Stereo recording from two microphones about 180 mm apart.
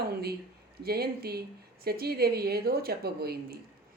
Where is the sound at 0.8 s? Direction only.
60° right (ahead or behind).